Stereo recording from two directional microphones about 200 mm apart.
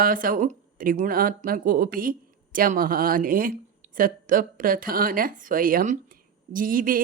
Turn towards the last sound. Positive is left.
turn(degrees=-45)  # may be behind; listen again after turning